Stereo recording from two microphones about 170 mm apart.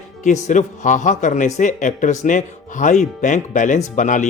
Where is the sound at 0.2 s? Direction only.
45° left (ahead or behind).